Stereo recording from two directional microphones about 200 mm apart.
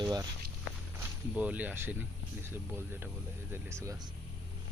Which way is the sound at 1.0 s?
5° right (ahead or behind).